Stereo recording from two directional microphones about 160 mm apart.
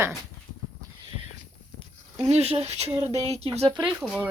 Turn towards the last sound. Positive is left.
turn(degrees=-5)  # may be behind; listen again after turning